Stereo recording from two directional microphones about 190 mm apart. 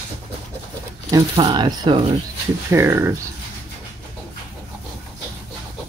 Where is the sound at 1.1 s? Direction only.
25° right (ahead or behind).